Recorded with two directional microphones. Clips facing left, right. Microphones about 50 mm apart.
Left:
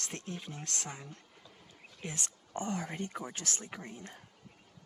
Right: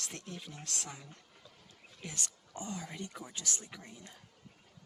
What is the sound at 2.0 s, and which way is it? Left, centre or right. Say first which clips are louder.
Speech: left 2 dB; left.